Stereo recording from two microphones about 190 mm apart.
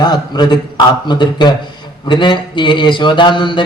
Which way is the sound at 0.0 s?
20° left (ahead or behind).